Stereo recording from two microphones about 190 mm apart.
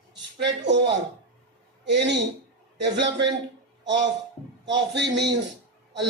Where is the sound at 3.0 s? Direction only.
25° right (ahead or behind).